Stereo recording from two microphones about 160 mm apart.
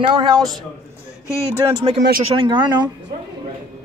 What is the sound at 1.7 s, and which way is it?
Speech, 35° right (ahead or behind).